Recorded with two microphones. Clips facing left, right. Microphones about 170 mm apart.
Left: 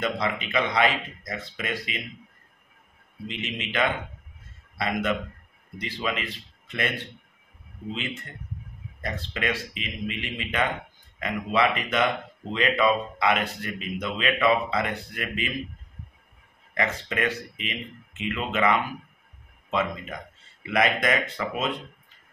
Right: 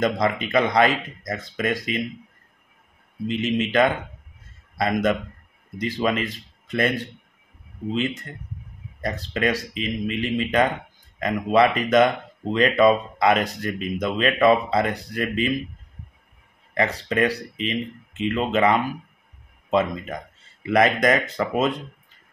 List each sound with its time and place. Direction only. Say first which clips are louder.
0.0 s speech: right 6 dB; 40° right (ahead or behind)
3.3 s speech: right 11 dB; 40° right (ahead or behind)
7.9 s speech: right 8 dB; 40° right (ahead or behind)
16.7 s speech: right 5 dB; 35° right (ahead or behind)